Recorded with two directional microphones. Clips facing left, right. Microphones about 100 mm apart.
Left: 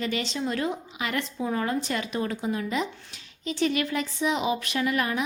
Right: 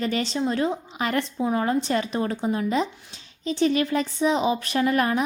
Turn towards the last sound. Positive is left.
turn(degrees=-40)  # may be behind; listen again after turning